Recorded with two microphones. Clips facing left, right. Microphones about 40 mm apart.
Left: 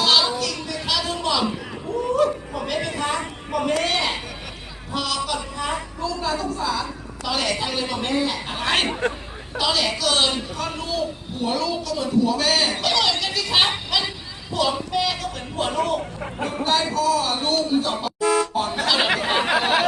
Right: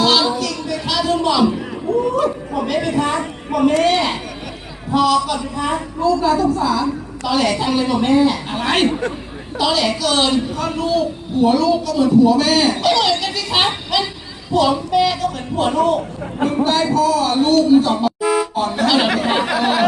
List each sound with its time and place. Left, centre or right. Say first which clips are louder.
0.0 s music: right 4 dB; centre
1.5 s a sound: right 8 dB; centre
4.9 s a child's voice: right 10 dB; centre
8.9 s a man's voice: right 3 dB; left
9.6 s a child's voice: right 5 dB; centre
16.9 s toot: right 5 dB; centre
19.0 s chatter: right 4 dB; centre